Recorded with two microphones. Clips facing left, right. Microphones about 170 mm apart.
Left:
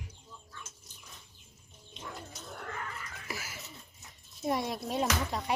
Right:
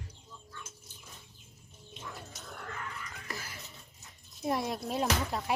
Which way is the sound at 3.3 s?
5° left (ahead or behind).